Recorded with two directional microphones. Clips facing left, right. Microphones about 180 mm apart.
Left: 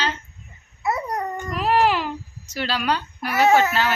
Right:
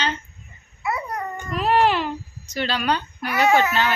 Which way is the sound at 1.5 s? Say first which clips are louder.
Right 1 dB; 10° left (ahead or behind).